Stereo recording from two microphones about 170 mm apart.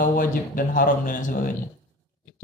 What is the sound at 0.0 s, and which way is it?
A man's voice, 55° left (ahead or behind).